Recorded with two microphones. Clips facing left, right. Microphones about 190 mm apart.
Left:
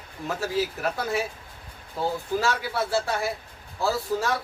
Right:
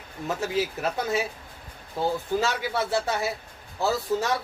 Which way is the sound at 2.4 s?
20° right (ahead or behind).